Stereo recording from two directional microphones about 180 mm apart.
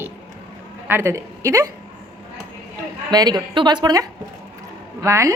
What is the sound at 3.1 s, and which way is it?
A woman's voice, 20° right (ahead or behind).